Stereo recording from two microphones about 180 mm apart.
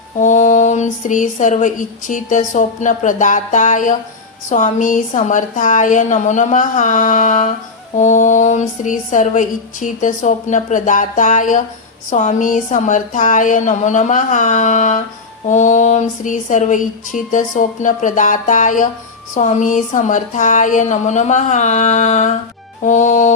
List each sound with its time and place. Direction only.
0.2 s speech: 45° left (ahead or behind)